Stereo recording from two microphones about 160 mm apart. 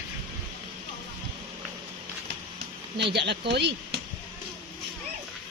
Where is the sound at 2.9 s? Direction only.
90° right.